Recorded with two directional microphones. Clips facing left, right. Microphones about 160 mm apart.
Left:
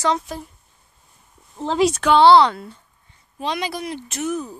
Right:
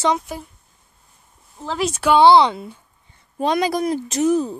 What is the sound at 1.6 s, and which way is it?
Speech, 25° left (ahead or behind).